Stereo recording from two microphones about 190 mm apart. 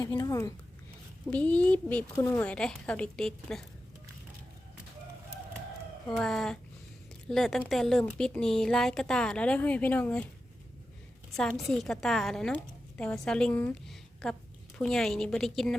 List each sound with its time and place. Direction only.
0.0 s speech: 20° left (ahead or behind); by 3.7 s centre (ahead or behind)
6.1 s a woman's voice: 5° left (ahead or behind)
11.3 s a woman's voice: centre (ahead or behind)